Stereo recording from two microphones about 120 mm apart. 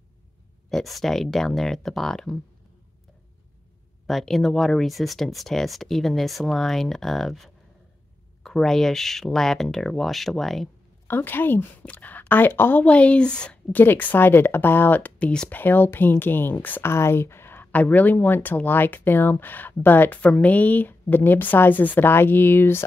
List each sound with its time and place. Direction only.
0.7 s speech: centre (ahead or behind)
4.1 s speech: centre (ahead or behind)
11.1 s a woman's voice: 15° left (ahead or behind)